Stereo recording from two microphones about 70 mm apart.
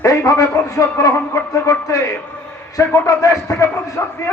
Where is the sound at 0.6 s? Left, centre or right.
Left.